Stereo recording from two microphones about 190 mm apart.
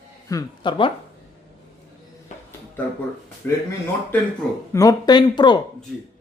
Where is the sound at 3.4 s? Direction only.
10° left (ahead or behind).